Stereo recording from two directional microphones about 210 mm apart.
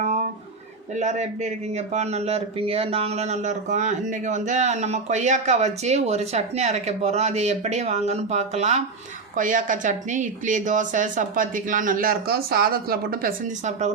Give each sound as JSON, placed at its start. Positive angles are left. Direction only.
{"t": 0.9, "sound": "speech", "side_deg": -35}